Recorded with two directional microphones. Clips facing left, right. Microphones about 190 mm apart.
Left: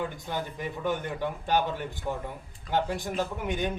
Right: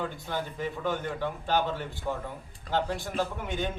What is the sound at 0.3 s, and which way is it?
A man's voice, 15° left (ahead or behind).